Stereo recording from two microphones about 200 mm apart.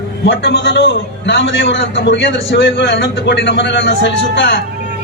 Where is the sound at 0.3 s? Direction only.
60° left (ahead or behind).